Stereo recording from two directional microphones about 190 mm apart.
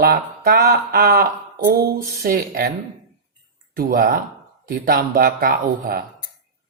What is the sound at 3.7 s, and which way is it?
Speech, 50° right (ahead or behind).